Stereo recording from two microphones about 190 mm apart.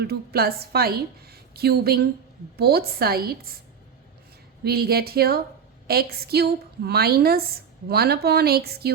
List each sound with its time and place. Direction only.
0.0 s a woman's voice: 55° right (ahead or behind)
4.6 s a woman's voice: 55° right (ahead or behind)